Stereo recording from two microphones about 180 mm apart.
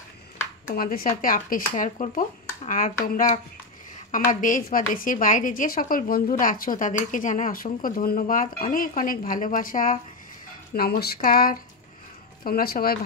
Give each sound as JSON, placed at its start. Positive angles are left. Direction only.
{"t": 0.7, "sound": "a woman's voice", "side_deg": 55}
{"t": 4.1, "sound": "a woman's voice", "side_deg": 45}